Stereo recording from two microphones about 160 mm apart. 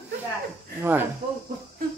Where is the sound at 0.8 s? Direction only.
15° right (ahead or behind).